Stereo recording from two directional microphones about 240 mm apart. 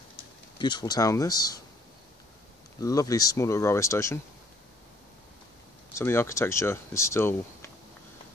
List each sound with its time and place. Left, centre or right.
0.6 s speech: centre
2.8 s speech: centre
5.9 s speech: centre